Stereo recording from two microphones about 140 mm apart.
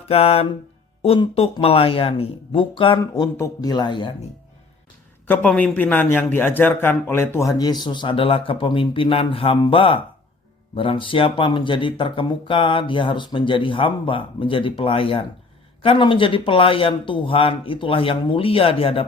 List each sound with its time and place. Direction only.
0.0 s mantra: 45° left (ahead or behind)
1.0 s speech: 45° left (ahead or behind)
3.0 s speech: 25° left (ahead or behind)
5.2 s a man's voice: 10° left (ahead or behind); by 19.0 s 40° left (ahead or behind)